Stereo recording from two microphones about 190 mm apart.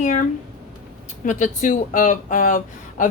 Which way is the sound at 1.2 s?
40° left (ahead or behind).